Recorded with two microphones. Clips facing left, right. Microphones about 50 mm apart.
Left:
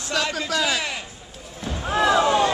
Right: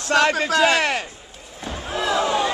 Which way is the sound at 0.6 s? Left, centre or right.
Right.